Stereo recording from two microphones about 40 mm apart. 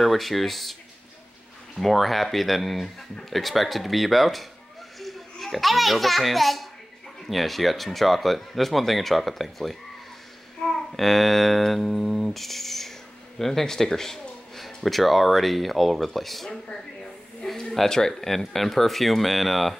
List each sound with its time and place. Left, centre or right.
0.0 s speech: centre
1.8 s a child's voice: centre
10.6 s babbling: left
11.0 s speech: centre